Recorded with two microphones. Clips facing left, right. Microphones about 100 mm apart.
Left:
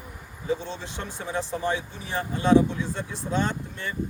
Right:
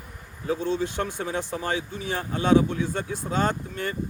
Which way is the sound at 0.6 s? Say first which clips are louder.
Right 9 dB; 60° right (ahead or behind).